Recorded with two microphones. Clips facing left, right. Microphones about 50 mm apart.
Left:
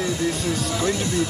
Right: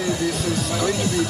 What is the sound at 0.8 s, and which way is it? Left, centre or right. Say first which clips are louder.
Speech: right 1 dB; right.